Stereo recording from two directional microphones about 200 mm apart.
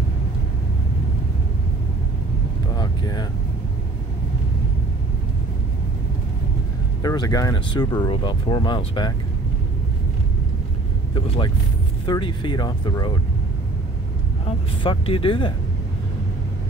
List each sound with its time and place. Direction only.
2.7 s a sound: 20° left (ahead or behind)
7.0 s speech: 20° left (ahead or behind)
11.1 s speech: 25° left (ahead or behind)
14.8 s speech: 25° left (ahead or behind)